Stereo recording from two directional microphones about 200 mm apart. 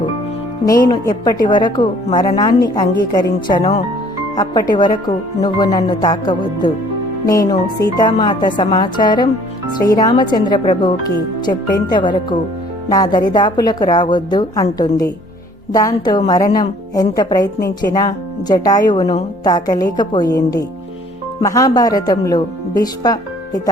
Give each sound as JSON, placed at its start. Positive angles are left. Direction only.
{"t": 0.6, "sound": "a woman's voice", "side_deg": 20}
{"t": 4.4, "sound": "a woman's voice", "side_deg": 20}
{"t": 8.0, "sound": "a woman's voice", "side_deg": 20}
{"t": 11.9, "sound": "a woman's voice", "side_deg": 25}